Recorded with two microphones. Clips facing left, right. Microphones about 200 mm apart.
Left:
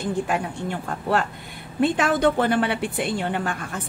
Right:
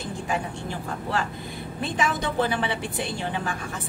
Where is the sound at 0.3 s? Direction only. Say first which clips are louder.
Left 3 dB; 60° left (ahead or behind).